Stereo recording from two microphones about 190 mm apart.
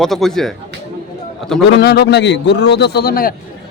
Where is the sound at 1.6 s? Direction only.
60° left (ahead or behind).